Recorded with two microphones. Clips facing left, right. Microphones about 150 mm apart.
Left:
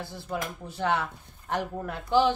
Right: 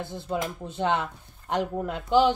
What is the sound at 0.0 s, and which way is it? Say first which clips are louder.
Speech: right 4 dB; 20° right (ahead or behind).